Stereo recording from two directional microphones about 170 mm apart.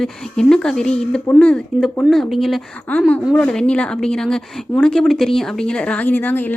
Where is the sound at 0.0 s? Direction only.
5° left (ahead or behind).